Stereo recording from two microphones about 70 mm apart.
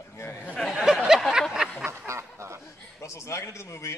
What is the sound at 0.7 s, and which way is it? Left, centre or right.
Speech, centre.